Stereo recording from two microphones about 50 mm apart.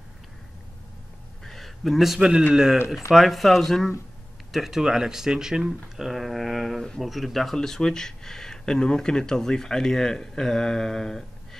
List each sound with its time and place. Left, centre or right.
1.4 s a sound: centre
2.5 s speech: centre
3.1 s speech: centre